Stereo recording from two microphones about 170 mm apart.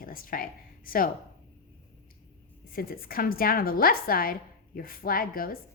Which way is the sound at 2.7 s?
60° left (ahead or behind).